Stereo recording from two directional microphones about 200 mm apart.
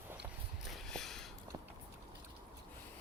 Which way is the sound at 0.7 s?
Centre (ahead or behind).